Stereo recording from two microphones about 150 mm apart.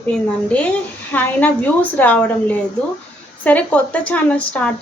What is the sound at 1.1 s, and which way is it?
A woman's voice, 10° left (ahead or behind).